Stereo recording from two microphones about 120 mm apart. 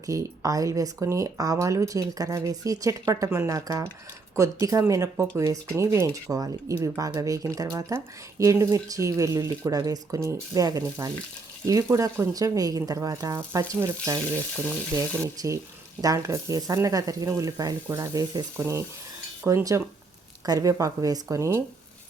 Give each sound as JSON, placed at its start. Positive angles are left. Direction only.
{"t": 0.0, "sound": "speech", "side_deg": -25}
{"t": 15.4, "sound": "speech", "side_deg": -30}